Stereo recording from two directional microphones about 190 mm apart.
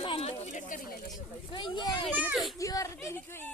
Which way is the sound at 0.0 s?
30° left (ahead or behind).